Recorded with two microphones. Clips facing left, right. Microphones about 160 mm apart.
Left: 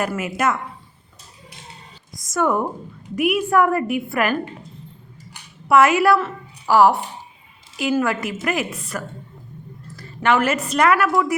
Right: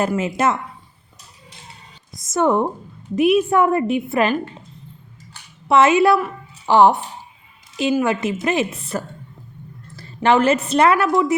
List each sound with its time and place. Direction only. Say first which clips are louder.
0.2 s a woman's voice: right 2 dB; 25° right (ahead or behind)
2.1 s a woman's voice: right 3 dB; 25° right (ahead or behind)
5.6 s a woman's voice: right 1 dB; 25° right (ahead or behind)
7.9 s a woman's voice: even; 20° right (ahead or behind)